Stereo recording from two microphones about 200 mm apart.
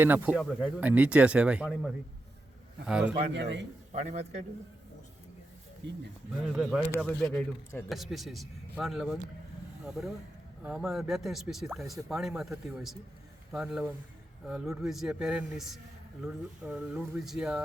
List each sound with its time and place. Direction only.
0.0 s speech: 10° right (ahead or behind)
3.3 s a man's voice: 60° right (ahead or behind)
3.9 s a man's voice: 35° right (ahead or behind)
5.8 s a man's voice: 60° right (ahead or behind)
6.3 s speech: centre (ahead or behind)
10.6 s speech: 5° right (ahead or behind)